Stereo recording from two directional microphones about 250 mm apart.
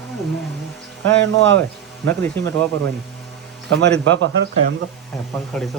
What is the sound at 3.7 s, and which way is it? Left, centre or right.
Speech, right.